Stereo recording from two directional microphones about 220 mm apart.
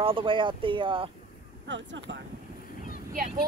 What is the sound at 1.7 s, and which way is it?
Speech, 55° right (ahead or behind).